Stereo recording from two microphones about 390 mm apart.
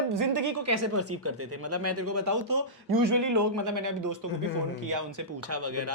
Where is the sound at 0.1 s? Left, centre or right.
Right.